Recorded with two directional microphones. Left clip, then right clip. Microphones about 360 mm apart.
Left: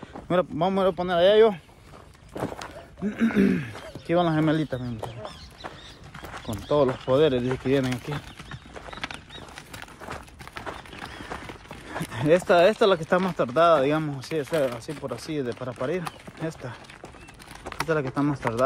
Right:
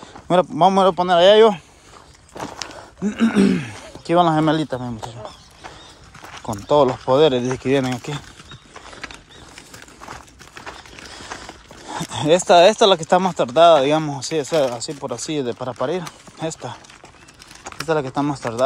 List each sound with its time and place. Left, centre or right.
0.3 s speech: centre
2.3 s walk: centre
3.1 s speech: centre
6.4 s speech: centre
12.0 s speech: centre
17.8 s speech: centre